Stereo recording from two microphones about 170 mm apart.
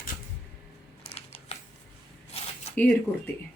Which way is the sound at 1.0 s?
35° left (ahead or behind).